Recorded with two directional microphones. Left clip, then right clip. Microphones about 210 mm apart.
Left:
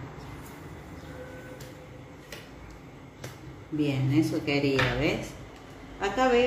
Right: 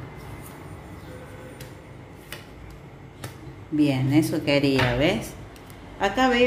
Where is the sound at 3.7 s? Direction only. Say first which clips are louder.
Right 6 dB; 55° right (ahead or behind).